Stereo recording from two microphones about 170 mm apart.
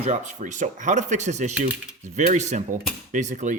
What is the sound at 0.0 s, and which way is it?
Speech, 45° right (ahead or behind).